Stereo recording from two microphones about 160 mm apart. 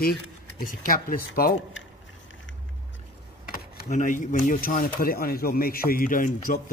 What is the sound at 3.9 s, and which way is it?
A man's voice, 50° left (ahead or behind).